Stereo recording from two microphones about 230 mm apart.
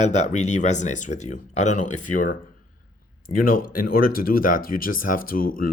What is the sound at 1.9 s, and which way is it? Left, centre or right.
Speech, left.